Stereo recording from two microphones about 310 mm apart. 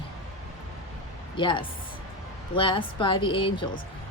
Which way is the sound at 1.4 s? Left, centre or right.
Centre.